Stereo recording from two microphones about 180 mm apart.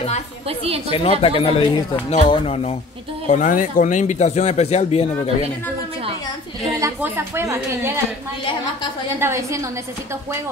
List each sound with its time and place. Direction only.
0.8 s speech: 30° left (ahead or behind)
3.3 s speech: 45° left (ahead or behind)
6.8 s a woman's voice: 15° right (ahead or behind)
9.2 s a woman's voice: 15° right (ahead or behind)